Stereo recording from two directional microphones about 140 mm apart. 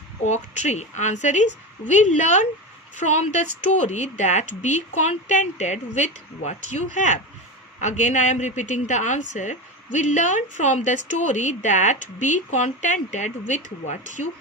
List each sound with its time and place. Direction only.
0.3 s a woman's voice: 55° left (ahead or behind)